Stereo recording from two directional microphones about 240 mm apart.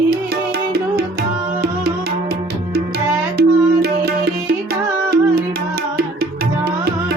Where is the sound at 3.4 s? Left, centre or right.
Right.